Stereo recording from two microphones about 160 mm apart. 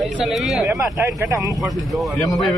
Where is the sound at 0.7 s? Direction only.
15° right (ahead or behind).